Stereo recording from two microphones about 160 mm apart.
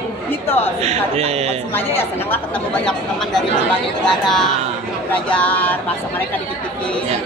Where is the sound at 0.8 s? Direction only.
40° right (ahead or behind).